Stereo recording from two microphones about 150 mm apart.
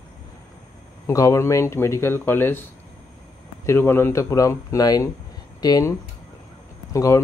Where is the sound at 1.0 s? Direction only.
20° left (ahead or behind).